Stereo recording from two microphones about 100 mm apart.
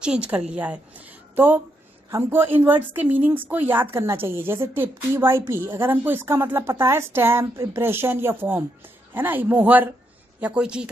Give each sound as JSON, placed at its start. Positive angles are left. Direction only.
{"t": 0.0, "sound": "a woman's voice", "side_deg": -10}